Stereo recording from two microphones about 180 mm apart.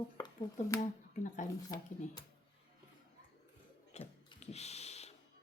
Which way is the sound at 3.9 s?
35° left (ahead or behind).